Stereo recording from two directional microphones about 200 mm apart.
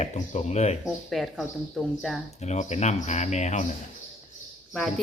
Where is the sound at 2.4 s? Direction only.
35° left (ahead or behind).